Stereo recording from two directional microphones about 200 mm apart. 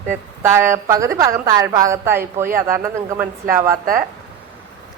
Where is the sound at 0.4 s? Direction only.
10° right (ahead or behind).